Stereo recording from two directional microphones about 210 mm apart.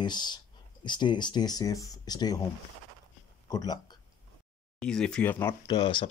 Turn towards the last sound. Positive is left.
turn(degrees=20)  # may be behind; listen again after turning